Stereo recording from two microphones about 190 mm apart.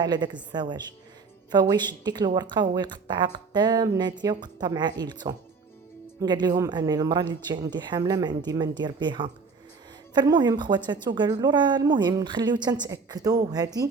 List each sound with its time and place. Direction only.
0.0 s speech: 20° right (ahead or behind)